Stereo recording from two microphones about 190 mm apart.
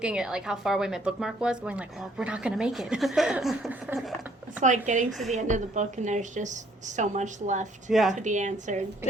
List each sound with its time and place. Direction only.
0.0 s speech: 5° right (ahead or behind)
4.6 s a woman's voice: 40° right (ahead or behind)
7.9 s speech: centre (ahead or behind)
8.2 s a woman's voice: 40° right (ahead or behind)